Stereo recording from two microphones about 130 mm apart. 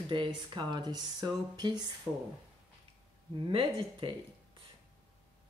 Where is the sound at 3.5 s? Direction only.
40° right (ahead or behind).